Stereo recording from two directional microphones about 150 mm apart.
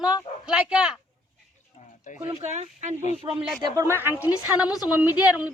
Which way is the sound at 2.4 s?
50° right (ahead or behind).